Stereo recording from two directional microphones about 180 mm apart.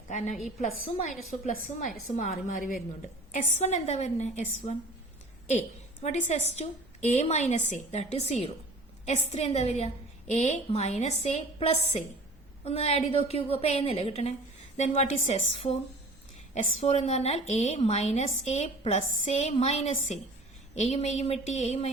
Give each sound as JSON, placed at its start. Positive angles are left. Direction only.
{"t": 0.1, "sound": "a woman's voice", "side_deg": 40}
{"t": 16.8, "sound": "a woman's voice", "side_deg": 40}